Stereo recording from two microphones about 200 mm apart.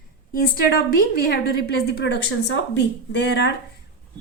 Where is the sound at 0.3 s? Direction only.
45° left (ahead or behind).